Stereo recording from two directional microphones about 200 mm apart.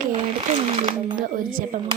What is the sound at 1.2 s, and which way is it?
Speech, 45° right (ahead or behind).